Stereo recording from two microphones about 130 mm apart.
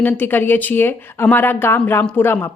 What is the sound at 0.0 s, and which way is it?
Speech, 15° left (ahead or behind).